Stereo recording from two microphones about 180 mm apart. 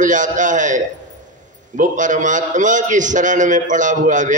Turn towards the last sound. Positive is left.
turn(degrees=-45)  # may be behind; listen again after turning